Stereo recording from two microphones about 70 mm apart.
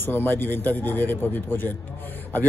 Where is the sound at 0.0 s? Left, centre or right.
Left.